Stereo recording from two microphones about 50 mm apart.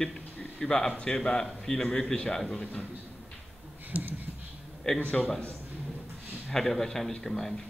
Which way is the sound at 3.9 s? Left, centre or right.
Right.